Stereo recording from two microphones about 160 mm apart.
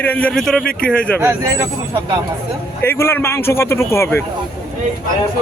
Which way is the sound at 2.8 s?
15° left (ahead or behind).